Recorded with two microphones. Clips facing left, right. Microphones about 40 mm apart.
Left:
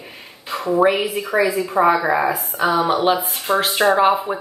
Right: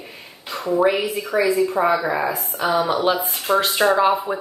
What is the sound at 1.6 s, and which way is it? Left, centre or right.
Speech, centre.